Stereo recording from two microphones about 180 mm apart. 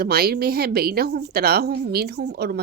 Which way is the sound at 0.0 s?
60° right (ahead or behind).